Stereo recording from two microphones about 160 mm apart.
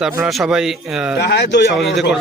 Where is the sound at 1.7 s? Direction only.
Centre (ahead or behind).